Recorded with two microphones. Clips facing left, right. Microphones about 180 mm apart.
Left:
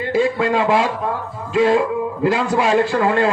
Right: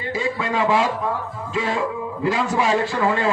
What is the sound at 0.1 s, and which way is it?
A man's voice, 65° left (ahead or behind).